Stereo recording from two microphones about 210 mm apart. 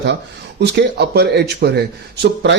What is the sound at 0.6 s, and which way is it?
A man's voice, 55° right (ahead or behind).